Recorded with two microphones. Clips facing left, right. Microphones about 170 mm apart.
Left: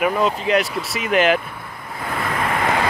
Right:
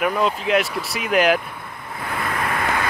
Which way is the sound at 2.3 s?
25° left (ahead or behind).